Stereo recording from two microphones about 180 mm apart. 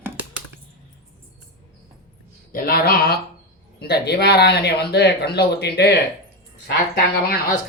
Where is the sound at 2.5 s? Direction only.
55° left (ahead or behind).